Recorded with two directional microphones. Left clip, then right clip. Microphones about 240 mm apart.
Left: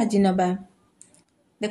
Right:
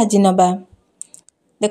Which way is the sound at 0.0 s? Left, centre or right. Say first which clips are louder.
Right 8 dB; right.